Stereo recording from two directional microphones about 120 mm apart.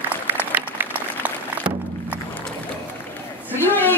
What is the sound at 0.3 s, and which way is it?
Applause, 15° right (ahead or behind).